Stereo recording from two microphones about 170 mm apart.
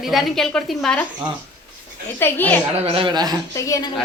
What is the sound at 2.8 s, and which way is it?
Speech, 30° right (ahead or behind).